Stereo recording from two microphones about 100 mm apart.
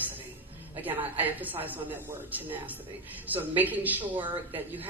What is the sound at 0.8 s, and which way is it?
A woman's voice, 20° right (ahead or behind).